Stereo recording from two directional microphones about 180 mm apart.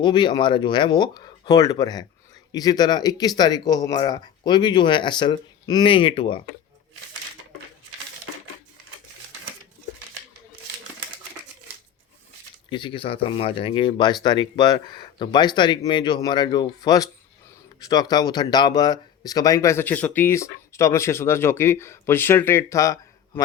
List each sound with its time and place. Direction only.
0.0 s speech: 25° left (ahead or behind)
12.7 s speech: 30° left (ahead or behind)